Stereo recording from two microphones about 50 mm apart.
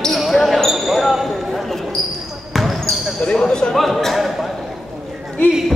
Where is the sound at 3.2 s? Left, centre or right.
Centre.